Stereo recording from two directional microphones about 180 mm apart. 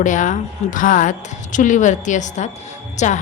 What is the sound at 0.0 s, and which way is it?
A woman's voice, 45° left (ahead or behind).